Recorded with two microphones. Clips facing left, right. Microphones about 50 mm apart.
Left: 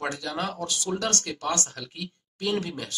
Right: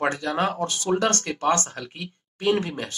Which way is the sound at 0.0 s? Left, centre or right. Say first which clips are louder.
Right 6 dB; right.